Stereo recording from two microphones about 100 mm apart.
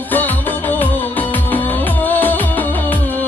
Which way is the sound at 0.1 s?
20° left (ahead or behind).